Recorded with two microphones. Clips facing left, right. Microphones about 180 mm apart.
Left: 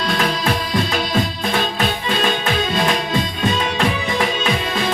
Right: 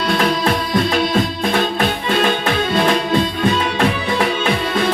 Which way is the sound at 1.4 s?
60° right (ahead or behind).